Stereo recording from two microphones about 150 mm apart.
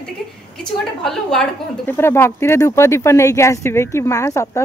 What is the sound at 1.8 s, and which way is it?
Speech, 15° left (ahead or behind).